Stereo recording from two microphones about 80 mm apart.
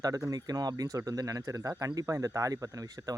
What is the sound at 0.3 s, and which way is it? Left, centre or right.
Speech, right.